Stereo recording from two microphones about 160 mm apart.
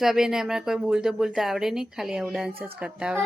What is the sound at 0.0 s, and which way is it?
Speech, 5° right (ahead or behind).